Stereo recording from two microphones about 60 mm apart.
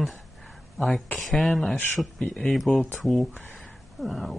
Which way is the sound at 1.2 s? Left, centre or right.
Centre.